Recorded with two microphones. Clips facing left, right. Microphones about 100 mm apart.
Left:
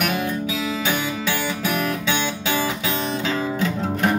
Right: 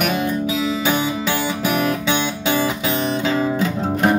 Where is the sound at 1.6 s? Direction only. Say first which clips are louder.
Right 4 dB; 20° right (ahead or behind).